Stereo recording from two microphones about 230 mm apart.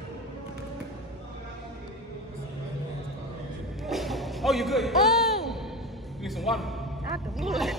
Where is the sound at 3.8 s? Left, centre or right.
Centre.